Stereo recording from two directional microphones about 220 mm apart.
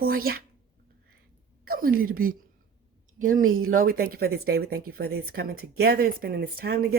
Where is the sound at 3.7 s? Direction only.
40° right (ahead or behind).